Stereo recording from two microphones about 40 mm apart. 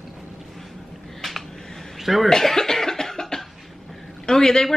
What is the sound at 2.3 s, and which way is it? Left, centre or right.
Cough, centre.